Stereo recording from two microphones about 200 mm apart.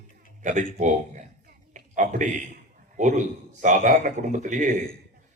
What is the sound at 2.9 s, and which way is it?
A man's voice, 40° right (ahead or behind).